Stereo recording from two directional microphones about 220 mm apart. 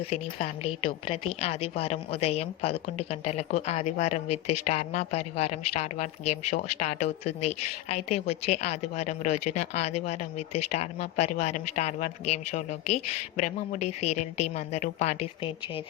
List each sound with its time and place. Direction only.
0.0 s a woman's voice: 25° left (ahead or behind)
4.3 s speech: 90° left
4.6 s a woman's voice: 30° left (ahead or behind)